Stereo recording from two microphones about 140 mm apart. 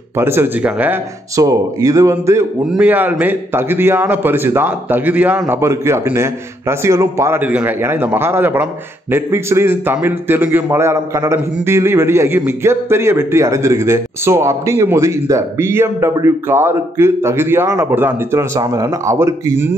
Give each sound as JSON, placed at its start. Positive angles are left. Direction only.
{"t": 0.2, "sound": "a man's voice", "side_deg": -15}
{"t": 1.3, "sound": "a man's voice", "side_deg": -25}